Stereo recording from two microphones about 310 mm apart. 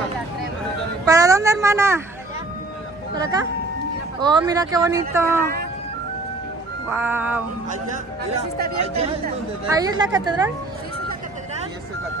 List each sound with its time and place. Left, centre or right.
1.0 s speech: centre
3.2 s speech: centre
6.9 s music: centre
8.5 s speech: right; by 10.5 s centre